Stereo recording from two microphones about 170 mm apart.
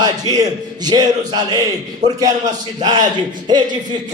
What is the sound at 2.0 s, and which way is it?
Speech, 45° right (ahead or behind).